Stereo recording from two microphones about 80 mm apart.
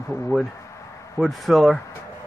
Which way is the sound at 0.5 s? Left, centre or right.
Left.